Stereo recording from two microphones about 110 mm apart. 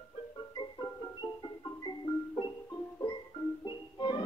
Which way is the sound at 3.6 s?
45° left (ahead or behind).